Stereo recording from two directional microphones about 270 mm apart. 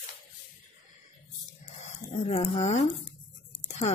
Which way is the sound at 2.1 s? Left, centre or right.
Left.